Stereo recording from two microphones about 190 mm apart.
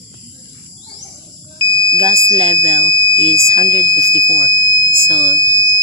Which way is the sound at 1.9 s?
25° right (ahead or behind).